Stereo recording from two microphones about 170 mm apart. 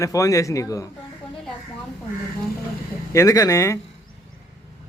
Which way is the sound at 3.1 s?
20° left (ahead or behind).